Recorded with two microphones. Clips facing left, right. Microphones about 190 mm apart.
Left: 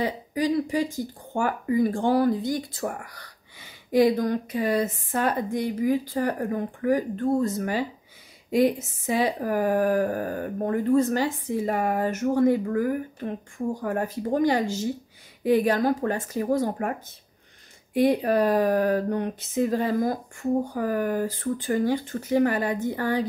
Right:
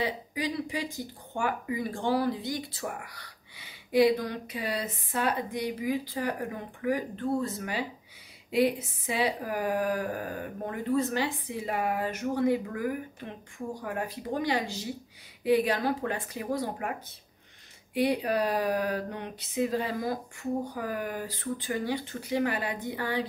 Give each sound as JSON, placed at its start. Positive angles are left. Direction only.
{"t": 0.0, "sound": "speech", "side_deg": 45}
{"t": 17.9, "sound": "speech", "side_deg": 45}